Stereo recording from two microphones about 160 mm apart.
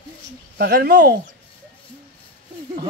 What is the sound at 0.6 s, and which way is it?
Speech, 75° right (ahead or behind).